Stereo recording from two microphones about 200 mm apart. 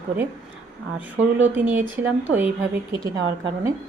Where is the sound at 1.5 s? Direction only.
10° right (ahead or behind).